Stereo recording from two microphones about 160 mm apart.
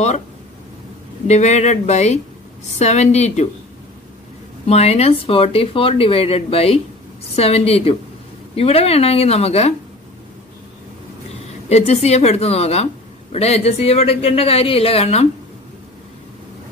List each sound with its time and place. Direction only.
1.2 s speech: 45° left (ahead or behind)
4.6 s speech: 40° left (ahead or behind)
11.7 s speech: 40° left (ahead or behind)